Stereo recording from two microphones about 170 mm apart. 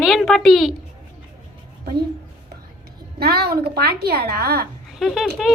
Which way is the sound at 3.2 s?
70° right (ahead or behind).